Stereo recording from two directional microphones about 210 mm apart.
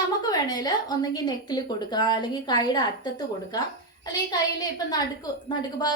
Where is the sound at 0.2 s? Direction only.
20° left (ahead or behind).